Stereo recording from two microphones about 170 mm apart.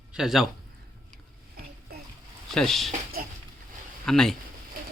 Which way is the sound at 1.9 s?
65° right (ahead or behind).